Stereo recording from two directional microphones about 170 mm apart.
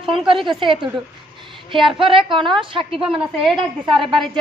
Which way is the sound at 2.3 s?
30° right (ahead or behind).